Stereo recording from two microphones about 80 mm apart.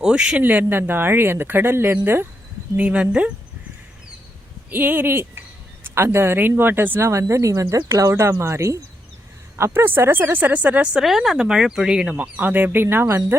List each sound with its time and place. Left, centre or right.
0.0 s speech: centre
0.4 s speech: right
2.7 s speech: centre
4.7 s speech: right
11.0 s speech: centre
12.1 s speech: right